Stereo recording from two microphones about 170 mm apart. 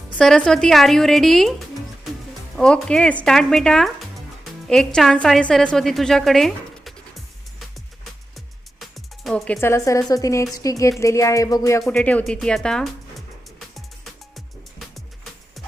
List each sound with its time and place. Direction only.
0.2 s speech: 5° left (ahead or behind)
8.8 s music: centre (ahead or behind); by 10.0 s 20° left (ahead or behind)
10.1 s speech: 20° left (ahead or behind)
11.8 s speech: 5° left (ahead or behind)
13.7 s music: centre (ahead or behind)